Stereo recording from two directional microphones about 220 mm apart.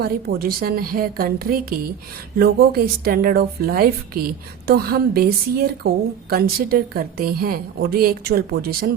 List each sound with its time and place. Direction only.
0.0 s a woman's voice: 45° right (ahead or behind)